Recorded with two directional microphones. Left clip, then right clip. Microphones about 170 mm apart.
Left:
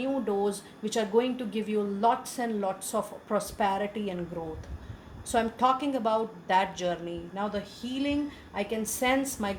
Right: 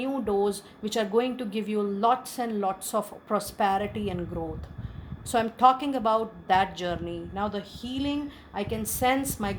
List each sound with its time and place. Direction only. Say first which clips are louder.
0.0 s a woman's voice: right 2 dB; 45° right (ahead or behind)
5.3 s a woman's voice: right 4 dB; 45° right (ahead or behind)